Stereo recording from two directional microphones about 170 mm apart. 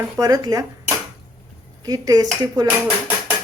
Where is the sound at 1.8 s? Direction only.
20° right (ahead or behind).